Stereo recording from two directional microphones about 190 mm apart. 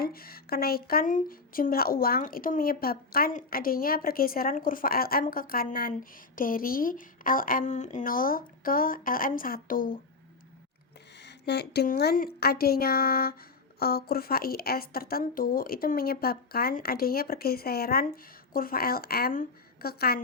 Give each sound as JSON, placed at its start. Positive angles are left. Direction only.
{"t": 0.0, "sound": "speech", "side_deg": 50}
{"t": 11.2, "sound": "speech", "side_deg": 60}